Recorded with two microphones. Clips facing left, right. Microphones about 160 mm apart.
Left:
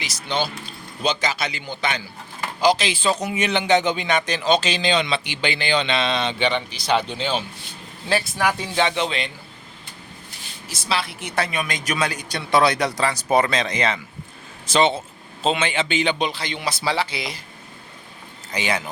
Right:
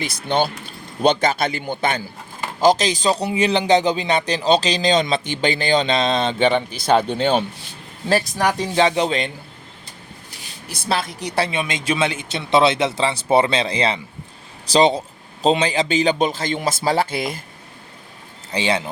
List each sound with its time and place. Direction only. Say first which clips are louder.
0.0 s a man's voice: right 5 dB; 55° right (ahead or behind)
8.1 s a man's voice: right 3 dB; 40° right (ahead or behind)
10.7 s a man's voice: right 3 dB; 50° right (ahead or behind)
18.5 s speech: right 4 dB; 30° right (ahead or behind)